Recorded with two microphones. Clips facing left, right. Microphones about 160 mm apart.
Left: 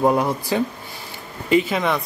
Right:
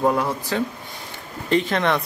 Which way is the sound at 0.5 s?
15° left (ahead or behind).